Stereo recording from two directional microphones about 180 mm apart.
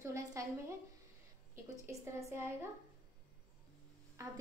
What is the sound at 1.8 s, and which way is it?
Speech, 15° right (ahead or behind).